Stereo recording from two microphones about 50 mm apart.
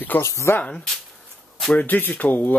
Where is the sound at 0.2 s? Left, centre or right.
Left.